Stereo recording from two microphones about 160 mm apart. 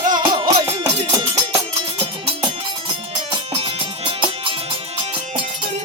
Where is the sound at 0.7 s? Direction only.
40° right (ahead or behind).